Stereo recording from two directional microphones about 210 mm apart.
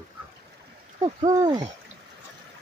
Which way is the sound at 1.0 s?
20° right (ahead or behind).